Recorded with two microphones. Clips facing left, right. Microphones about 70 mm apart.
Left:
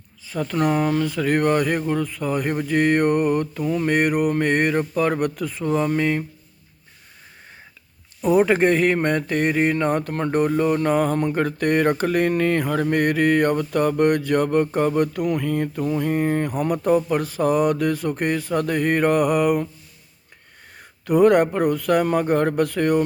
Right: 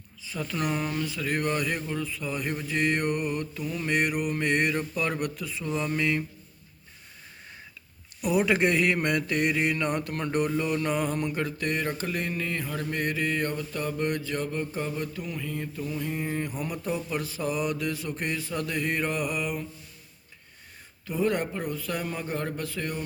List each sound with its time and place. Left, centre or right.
0.3 s mantra: left
8.2 s mantra: left
21.1 s speech: left